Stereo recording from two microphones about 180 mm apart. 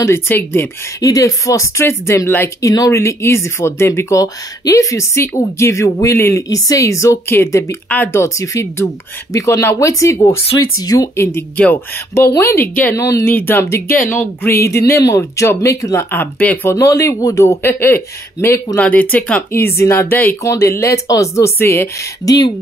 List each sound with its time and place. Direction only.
0.0 s speech: 15° left (ahead or behind)